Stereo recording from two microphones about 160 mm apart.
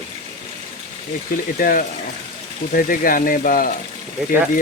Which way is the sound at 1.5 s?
60° left (ahead or behind).